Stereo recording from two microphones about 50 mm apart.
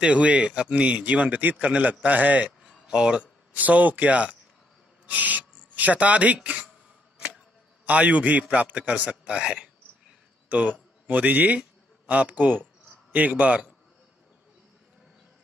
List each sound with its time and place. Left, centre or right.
0.0 s a man's voice: right
2.6 s a sound: centre
3.5 s a man's voice: right
7.8 s a man's voice: right
10.5 s a man's voice: right